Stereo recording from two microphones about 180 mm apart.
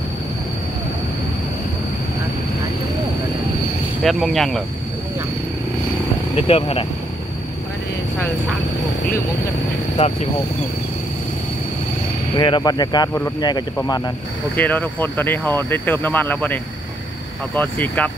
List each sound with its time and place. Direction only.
4.0 s speech: centre (ahead or behind)
6.3 s speech: 30° left (ahead or behind)
12.4 s speech: 25° left (ahead or behind)
14.5 s speech: 10° left (ahead or behind)
17.6 s speech: 5° left (ahead or behind)